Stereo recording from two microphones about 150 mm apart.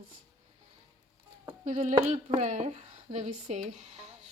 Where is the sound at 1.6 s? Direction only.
55° right (ahead or behind).